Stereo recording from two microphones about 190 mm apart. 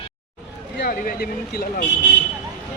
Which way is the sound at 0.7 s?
50° left (ahead or behind).